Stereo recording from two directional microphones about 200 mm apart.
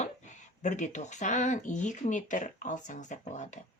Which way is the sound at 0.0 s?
35° left (ahead or behind).